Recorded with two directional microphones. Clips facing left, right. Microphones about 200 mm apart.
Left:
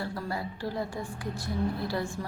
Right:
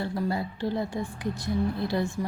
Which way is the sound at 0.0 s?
25° right (ahead or behind).